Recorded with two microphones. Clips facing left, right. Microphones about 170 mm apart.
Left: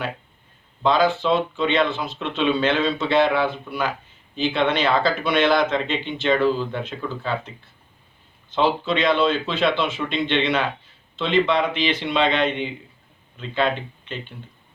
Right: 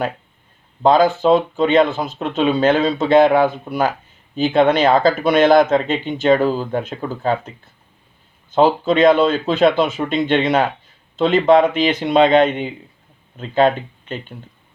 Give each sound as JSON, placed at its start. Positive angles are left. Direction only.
{"t": 0.8, "sound": "speech", "side_deg": -45}